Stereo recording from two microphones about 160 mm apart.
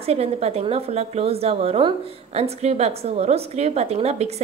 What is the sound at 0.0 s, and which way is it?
A woman's voice, 40° right (ahead or behind).